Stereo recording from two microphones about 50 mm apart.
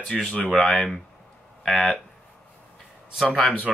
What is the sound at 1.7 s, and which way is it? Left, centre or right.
Speech, left.